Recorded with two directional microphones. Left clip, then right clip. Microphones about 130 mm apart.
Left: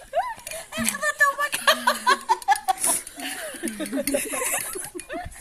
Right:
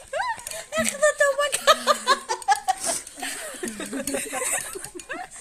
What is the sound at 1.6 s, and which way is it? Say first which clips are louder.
Chuckle: even; 15° right (ahead or behind).